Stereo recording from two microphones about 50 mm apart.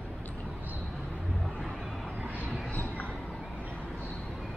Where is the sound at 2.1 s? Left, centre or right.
Right.